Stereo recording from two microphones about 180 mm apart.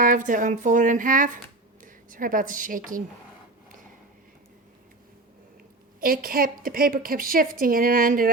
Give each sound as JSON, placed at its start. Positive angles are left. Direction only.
{"t": 0.0, "sound": "a woman's voice", "side_deg": -45}
{"t": 6.0, "sound": "a woman's voice", "side_deg": -55}